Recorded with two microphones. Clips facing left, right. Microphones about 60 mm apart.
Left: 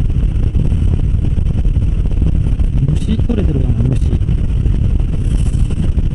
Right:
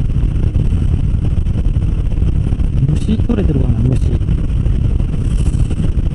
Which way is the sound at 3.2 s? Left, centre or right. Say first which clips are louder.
Right 1 dB; right.